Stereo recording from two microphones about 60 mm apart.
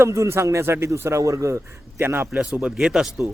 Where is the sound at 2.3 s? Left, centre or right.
Centre.